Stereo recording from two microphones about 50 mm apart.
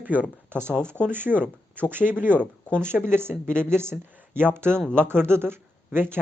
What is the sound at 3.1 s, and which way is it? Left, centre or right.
Speech, right.